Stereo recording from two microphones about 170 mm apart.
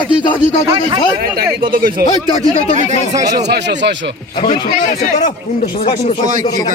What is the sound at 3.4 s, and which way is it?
Speech, 85° right.